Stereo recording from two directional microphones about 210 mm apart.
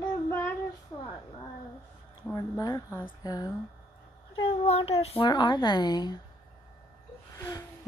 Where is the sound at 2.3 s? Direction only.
15° left (ahead or behind).